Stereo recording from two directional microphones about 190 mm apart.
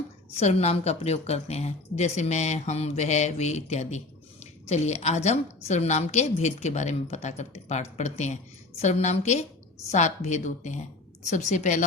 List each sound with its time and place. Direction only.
0.3 s a woman's voice: 35° left (ahead or behind)